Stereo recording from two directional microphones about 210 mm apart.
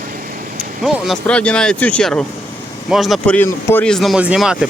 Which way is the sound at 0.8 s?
Centre (ahead or behind).